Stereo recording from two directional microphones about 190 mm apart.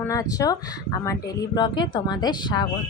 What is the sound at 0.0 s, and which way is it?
Speech, 15° left (ahead or behind).